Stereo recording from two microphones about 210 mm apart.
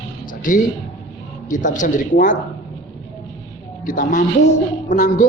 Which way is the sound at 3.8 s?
40° left (ahead or behind).